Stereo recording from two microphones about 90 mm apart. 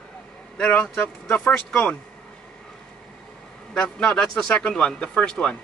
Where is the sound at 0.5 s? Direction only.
15° left (ahead or behind).